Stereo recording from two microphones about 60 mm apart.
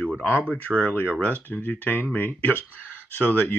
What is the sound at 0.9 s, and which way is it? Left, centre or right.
Speech, left.